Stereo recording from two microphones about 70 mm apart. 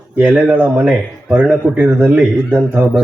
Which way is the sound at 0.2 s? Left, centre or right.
Centre.